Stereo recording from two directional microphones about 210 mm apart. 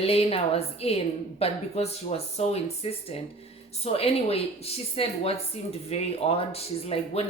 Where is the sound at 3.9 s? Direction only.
30° left (ahead or behind).